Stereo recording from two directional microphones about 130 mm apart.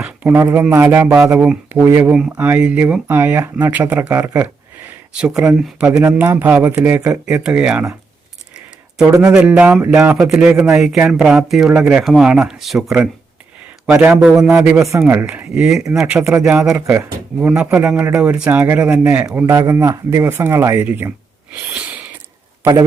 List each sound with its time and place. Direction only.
0.0 s speech: 10° right (ahead or behind)
9.0 s a man's voice: 20° right (ahead or behind)
14.8 s speech: 20° right (ahead or behind)
19.5 s speech: 25° right (ahead or behind)
21.5 s a sound: 10° right (ahead or behind)